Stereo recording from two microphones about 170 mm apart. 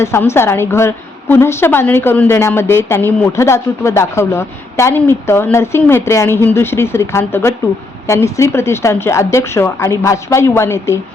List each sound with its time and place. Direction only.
0.0 s a woman's voice: 15° left (ahead or behind)